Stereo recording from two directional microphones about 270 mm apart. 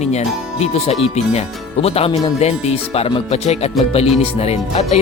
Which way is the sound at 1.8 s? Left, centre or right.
Left.